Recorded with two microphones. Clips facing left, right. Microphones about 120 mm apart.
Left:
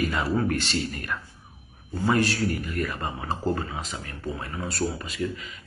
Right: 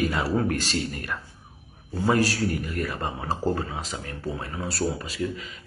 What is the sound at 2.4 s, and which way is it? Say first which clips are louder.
Speech: even; centre (ahead or behind).